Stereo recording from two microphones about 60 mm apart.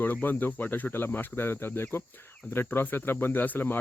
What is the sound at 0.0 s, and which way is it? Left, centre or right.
Speech, left.